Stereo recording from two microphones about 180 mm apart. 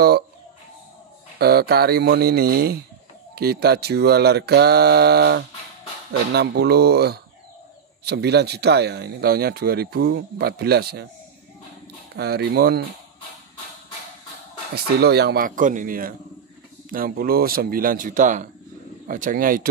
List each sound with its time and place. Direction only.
1.4 s speech: 60° right (ahead or behind)
12.2 s speech: 60° right (ahead or behind)
15.0 s speech: 65° right (ahead or behind)